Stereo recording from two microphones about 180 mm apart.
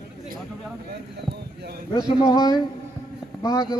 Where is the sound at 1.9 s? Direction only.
20° left (ahead or behind).